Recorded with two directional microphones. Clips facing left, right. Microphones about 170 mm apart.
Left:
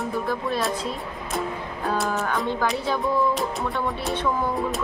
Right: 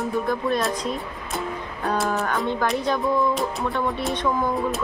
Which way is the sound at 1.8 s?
Centre (ahead or behind).